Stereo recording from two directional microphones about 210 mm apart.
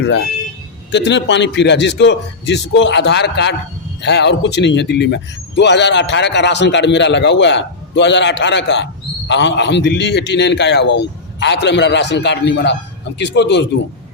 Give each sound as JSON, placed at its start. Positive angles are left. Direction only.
{"t": 0.9, "sound": "a man's voice", "side_deg": 55}